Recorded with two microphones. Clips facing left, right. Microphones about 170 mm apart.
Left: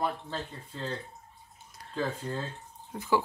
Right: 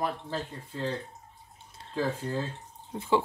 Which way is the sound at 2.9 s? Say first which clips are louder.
Right 2 dB; 25° right (ahead or behind).